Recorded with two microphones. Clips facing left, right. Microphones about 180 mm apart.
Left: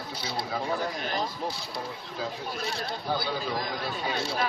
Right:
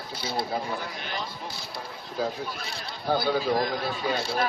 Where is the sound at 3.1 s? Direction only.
50° right (ahead or behind).